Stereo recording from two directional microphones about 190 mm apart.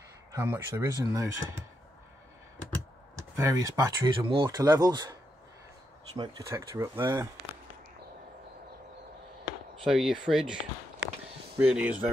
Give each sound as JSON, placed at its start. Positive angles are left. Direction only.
{"t": 0.3, "sound": "speech", "side_deg": -15}
{"t": 3.2, "sound": "speech", "side_deg": -15}
{"t": 6.1, "sound": "speech", "side_deg": -25}
{"t": 6.5, "sound": "speech", "side_deg": -15}
{"t": 9.8, "sound": "speech", "side_deg": 0}